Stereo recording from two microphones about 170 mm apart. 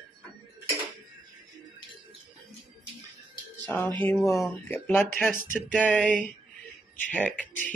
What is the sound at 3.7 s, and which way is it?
Speech, 10° left (ahead or behind).